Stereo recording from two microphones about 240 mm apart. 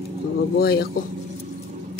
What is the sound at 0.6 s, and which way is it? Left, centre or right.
Speech, left.